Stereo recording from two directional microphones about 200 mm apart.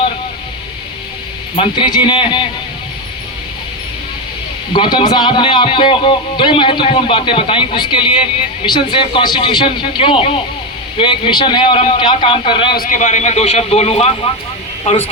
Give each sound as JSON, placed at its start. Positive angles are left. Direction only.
{"t": 1.5, "sound": "a man's voice", "side_deg": 25}
{"t": 4.7, "sound": "a man's voice", "side_deg": 25}
{"t": 12.7, "sound": "a man's voice", "side_deg": 45}